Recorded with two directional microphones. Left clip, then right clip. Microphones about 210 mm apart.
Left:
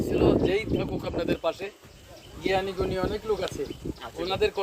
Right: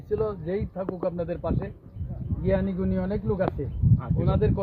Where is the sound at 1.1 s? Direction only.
25° left (ahead or behind).